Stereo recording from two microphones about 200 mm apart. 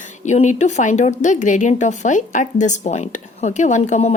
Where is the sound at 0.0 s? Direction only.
35° left (ahead or behind).